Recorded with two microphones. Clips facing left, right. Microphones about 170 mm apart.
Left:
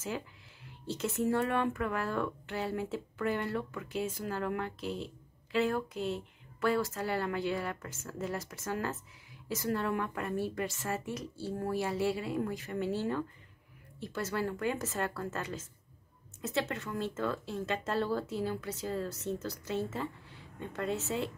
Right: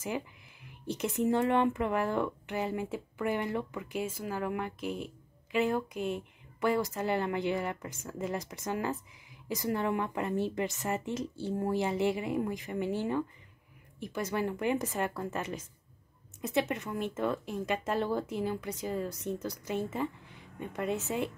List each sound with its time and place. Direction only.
0.0 s a woman's voice: 15° right (ahead or behind)